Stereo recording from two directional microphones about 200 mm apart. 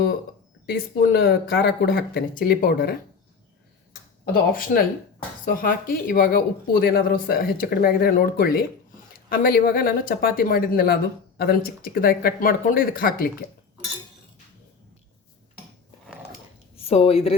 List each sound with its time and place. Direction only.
0.6 s speech: 50° left (ahead or behind)
4.3 s speech: 45° left (ahead or behind)
16.7 s speech: 30° left (ahead or behind)